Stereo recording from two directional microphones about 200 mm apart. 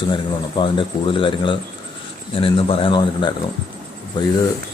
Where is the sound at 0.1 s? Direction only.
25° left (ahead or behind).